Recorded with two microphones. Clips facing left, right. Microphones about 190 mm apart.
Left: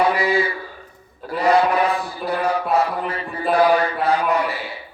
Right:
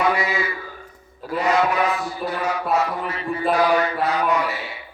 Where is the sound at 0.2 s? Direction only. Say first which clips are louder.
Left 5 dB; 35° left (ahead or behind).